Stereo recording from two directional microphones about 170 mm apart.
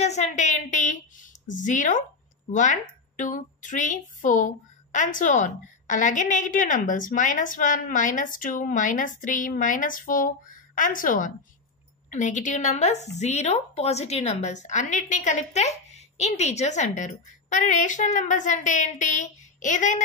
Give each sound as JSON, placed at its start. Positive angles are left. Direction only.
{"t": 0.0, "sound": "a woman's voice", "side_deg": 40}